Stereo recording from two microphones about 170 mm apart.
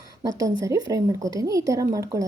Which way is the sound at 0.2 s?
20° right (ahead or behind).